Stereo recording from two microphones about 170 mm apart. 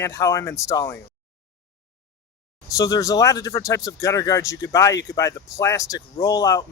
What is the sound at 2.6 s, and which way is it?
Speech, 20° left (ahead or behind).